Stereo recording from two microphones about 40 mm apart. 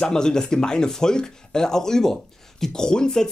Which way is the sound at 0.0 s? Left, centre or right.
Centre.